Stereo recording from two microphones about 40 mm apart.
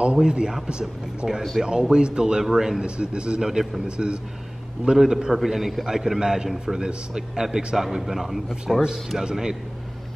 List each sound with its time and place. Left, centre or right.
0.0 s a man's voice: right; by 2.8 s centre
2.8 s speech: right
3.4 s a man's voice: centre
3.9 s speech: right
4.9 s a man's voice: centre
5.9 s a man's voice: centre
7.7 s a man's voice: centre